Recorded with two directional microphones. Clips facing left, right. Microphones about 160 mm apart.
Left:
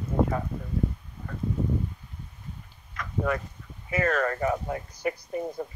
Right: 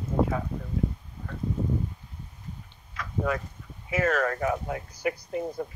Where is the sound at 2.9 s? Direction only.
Centre (ahead or behind).